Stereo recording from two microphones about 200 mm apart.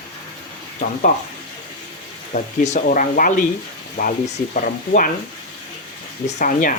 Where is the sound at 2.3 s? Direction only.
40° left (ahead or behind).